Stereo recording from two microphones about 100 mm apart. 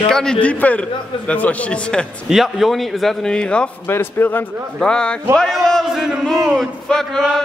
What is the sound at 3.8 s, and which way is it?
Speech, 20° left (ahead or behind).